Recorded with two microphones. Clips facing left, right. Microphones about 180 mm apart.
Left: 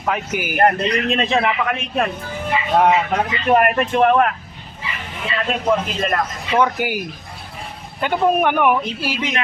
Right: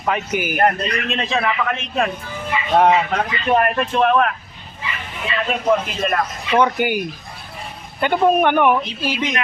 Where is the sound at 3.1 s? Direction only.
15° left (ahead or behind).